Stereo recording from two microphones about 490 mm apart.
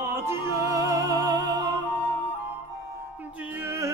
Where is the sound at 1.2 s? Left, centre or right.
Centre.